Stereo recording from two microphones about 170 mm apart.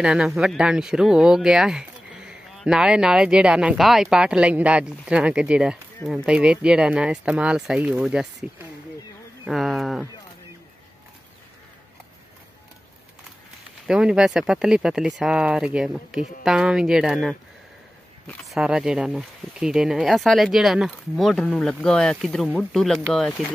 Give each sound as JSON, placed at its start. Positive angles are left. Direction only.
{"t": 0.0, "sound": "speech", "side_deg": -5}
{"t": 9.5, "sound": "speech", "side_deg": 0}
{"t": 13.8, "sound": "speech", "side_deg": -5}